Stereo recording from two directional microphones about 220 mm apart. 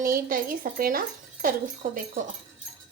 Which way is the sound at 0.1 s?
40° right (ahead or behind).